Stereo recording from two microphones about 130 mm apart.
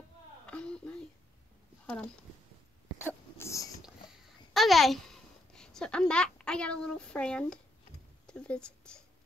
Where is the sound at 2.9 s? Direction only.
20° left (ahead or behind).